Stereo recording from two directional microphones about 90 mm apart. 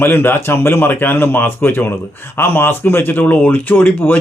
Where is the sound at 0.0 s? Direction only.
25° left (ahead or behind).